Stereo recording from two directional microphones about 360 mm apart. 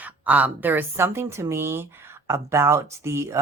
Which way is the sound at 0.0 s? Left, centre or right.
Centre.